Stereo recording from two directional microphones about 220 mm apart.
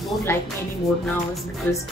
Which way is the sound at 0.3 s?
10° left (ahead or behind).